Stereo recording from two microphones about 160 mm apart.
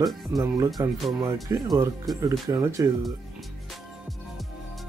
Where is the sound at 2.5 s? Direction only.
20° right (ahead or behind).